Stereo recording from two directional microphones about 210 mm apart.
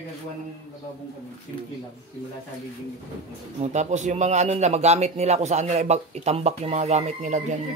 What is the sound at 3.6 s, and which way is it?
A man's voice, 35° right (ahead or behind).